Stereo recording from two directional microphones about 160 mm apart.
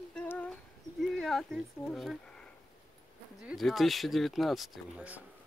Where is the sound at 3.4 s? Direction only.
Centre (ahead or behind).